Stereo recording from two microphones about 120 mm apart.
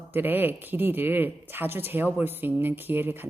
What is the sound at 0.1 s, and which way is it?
A woman's voice, 15° right (ahead or behind).